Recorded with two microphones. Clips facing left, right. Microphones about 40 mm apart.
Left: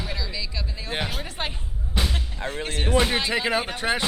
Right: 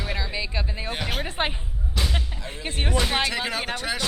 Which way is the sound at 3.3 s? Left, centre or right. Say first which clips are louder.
Left 3 dB; centre.